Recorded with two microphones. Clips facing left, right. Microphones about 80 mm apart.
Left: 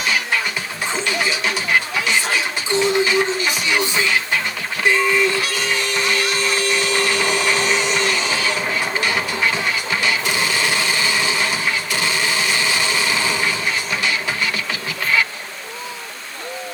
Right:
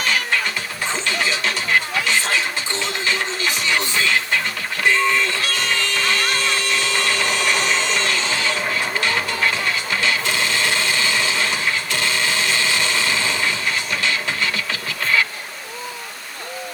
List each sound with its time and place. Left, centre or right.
1.0 s music: centre
4.8 s a sound: centre
6.3 s tools: centre
9.9 s music: centre